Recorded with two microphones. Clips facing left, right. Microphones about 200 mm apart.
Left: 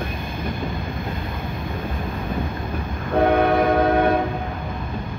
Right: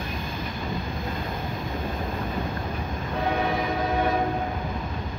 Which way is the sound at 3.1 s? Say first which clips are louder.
Left 9 dB; 60° left (ahead or behind).